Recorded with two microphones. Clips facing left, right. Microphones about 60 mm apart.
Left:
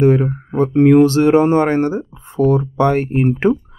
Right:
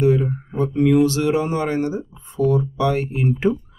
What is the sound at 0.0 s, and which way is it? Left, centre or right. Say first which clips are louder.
Speech: left 4 dB; left.